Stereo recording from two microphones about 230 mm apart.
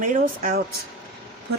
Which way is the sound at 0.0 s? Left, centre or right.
Right.